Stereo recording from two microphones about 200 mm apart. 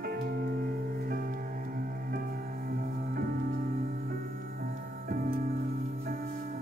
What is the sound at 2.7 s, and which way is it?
Music, 45° right (ahead or behind).